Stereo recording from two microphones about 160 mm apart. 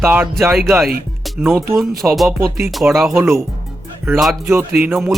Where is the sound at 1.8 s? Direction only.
Centre (ahead or behind).